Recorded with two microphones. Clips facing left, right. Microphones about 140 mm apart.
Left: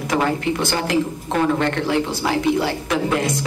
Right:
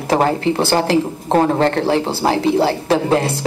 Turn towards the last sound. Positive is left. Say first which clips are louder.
# right 5 dB
turn(degrees=-30)  # may be behind; listen again after turning